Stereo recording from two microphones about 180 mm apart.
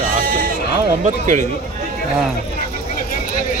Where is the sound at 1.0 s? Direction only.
40° right (ahead or behind).